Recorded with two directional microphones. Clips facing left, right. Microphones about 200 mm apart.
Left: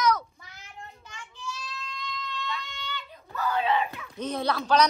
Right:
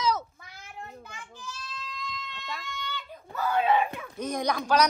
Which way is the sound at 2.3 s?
50° right (ahead or behind).